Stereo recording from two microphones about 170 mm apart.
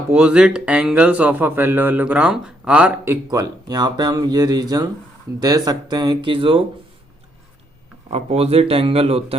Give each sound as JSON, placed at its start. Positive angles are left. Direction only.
{"t": 0.1, "sound": "speech", "side_deg": -5}
{"t": 8.1, "sound": "speech", "side_deg": -35}